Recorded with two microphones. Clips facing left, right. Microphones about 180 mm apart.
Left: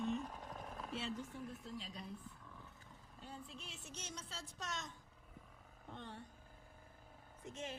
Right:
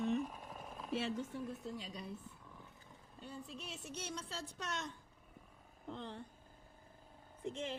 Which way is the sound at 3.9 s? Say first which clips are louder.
Right 6 dB; 60° right (ahead or behind).